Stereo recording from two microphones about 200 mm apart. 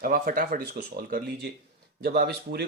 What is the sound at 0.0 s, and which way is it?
Speech, 45° right (ahead or behind).